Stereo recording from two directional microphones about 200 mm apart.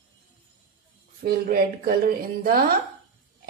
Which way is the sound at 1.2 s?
50° right (ahead or behind).